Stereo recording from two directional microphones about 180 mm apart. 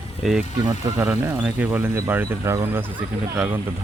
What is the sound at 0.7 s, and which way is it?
A man's voice, 15° right (ahead or behind).